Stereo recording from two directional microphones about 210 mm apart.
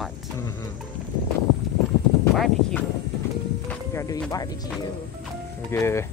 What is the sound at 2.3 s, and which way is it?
Speech, centre (ahead or behind).